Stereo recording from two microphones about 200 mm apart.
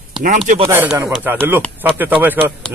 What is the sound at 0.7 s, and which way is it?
A man's voice, 15° right (ahead or behind).